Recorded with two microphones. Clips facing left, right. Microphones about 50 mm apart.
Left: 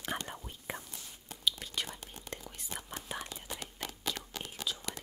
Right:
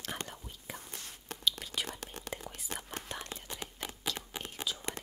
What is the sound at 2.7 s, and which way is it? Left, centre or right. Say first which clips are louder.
Whispering: right 2 dB; right.